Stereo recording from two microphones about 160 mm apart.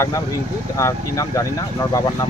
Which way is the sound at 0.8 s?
20° left (ahead or behind).